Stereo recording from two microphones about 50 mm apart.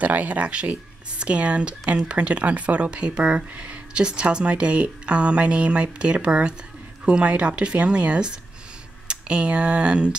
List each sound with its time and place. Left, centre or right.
0.0 s speech: right